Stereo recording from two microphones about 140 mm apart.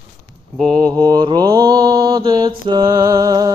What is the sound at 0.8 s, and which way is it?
Mantra, 30° right (ahead or behind).